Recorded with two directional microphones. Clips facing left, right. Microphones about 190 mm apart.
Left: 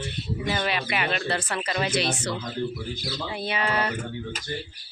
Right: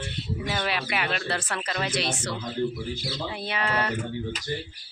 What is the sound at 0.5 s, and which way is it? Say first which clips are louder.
Speech: left 1 dB; centre (ahead or behind).